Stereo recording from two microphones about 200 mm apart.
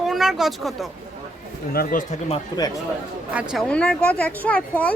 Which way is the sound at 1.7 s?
45° left (ahead or behind).